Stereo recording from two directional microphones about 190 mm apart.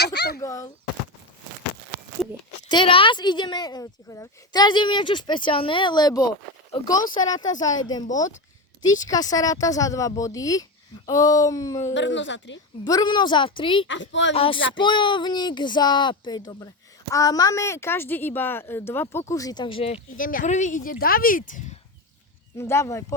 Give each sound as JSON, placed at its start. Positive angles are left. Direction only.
{"t": 0.0, "sound": "a sound", "side_deg": 60}
{"t": 0.3, "sound": "a sound", "side_deg": 15}
{"t": 2.6, "sound": "speech", "side_deg": 25}
{"t": 9.0, "sound": "a woman's voice", "side_deg": 20}
{"t": 11.9, "sound": "a woman's voice", "side_deg": 75}
{"t": 12.8, "sound": "speech", "side_deg": 20}
{"t": 13.8, "sound": "a woman's voice", "side_deg": 75}
{"t": 14.3, "sound": "a woman's voice", "side_deg": 30}
{"t": 20.1, "sound": "speech", "side_deg": 45}
{"t": 22.5, "sound": "a woman's voice", "side_deg": 15}